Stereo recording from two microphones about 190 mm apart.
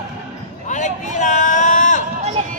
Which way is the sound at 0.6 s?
40° left (ahead or behind).